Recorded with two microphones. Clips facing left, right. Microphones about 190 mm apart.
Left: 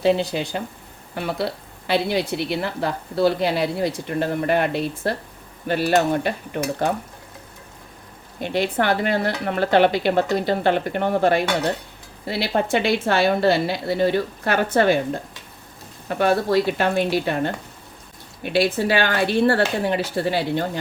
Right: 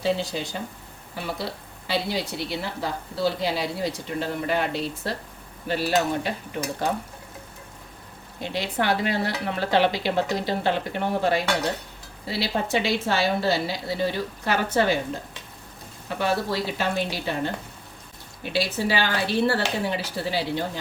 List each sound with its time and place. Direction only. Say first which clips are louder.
0.0 s a woman's voice: left 6 dB; 60° left (ahead or behind)
8.4 s a woman's voice: left 5 dB; 55° left (ahead or behind)
16.0 s a woman's voice: left 6 dB; 55° left (ahead or behind)